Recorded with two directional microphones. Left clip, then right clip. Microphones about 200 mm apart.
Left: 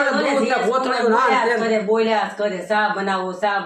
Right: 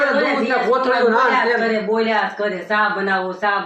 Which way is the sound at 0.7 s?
60° left (ahead or behind).